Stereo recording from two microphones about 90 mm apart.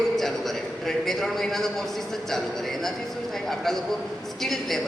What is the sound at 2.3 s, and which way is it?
A man's voice, 5° left (ahead or behind).